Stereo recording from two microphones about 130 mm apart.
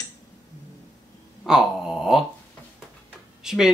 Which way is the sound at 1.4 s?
5° right (ahead or behind).